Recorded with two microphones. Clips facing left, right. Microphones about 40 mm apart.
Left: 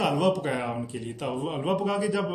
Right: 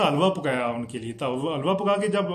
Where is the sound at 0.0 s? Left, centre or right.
Right.